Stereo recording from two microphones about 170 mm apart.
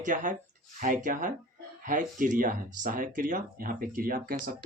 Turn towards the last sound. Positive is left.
turn(degrees=-55)  # may be behind; listen again after turning